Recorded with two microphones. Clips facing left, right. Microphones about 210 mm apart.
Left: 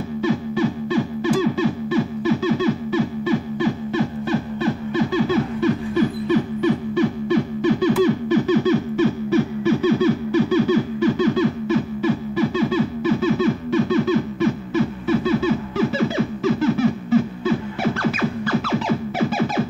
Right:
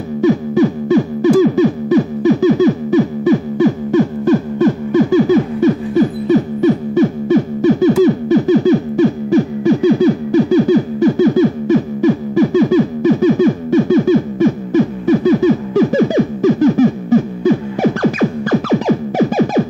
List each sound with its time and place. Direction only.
0.2 s music: 45° right (ahead or behind)